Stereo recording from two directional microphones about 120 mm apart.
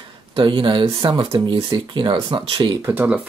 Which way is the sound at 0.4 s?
45° right (ahead or behind).